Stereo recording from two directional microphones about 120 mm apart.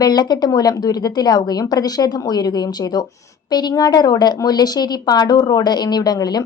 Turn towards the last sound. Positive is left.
turn(degrees=35)  # may be behind; listen again after turning